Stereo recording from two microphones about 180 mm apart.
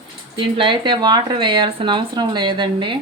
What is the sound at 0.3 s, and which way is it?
Speech, 30° right (ahead or behind).